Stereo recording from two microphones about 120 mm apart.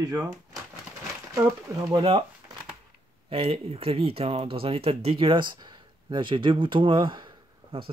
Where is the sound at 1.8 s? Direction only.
30° right (ahead or behind).